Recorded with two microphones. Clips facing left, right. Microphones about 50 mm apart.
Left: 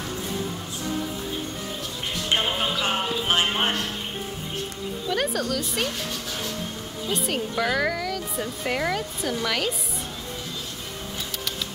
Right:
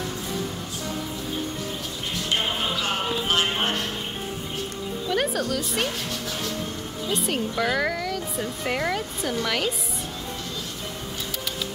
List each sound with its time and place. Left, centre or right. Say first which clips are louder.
2.8 s music: left 1 dB; left
5.1 s speech: right 1 dB; centre
7.1 s speech: right 1 dB; centre